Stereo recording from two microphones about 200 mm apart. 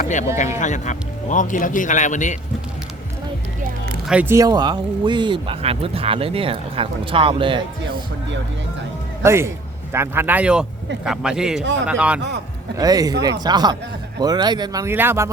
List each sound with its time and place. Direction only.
0.0 s a man's voice: 40° left (ahead or behind)
4.1 s speech: 10° right (ahead or behind); by 7.6 s 25° right (ahead or behind)
9.2 s a man's voice: 15° right (ahead or behind)
12.7 s speech: 20° right (ahead or behind)